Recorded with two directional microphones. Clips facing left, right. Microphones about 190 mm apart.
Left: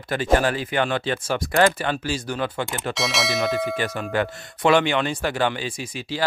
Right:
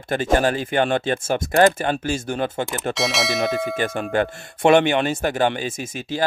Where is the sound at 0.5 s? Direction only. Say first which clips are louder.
Right 3 dB; 45° right (ahead or behind).